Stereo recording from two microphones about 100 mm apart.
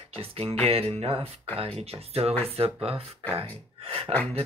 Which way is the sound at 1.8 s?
90° right.